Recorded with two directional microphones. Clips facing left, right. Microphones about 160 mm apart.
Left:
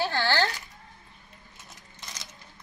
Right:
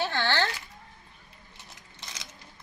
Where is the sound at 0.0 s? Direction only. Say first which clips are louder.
Left 2 dB; 10° left (ahead or behind).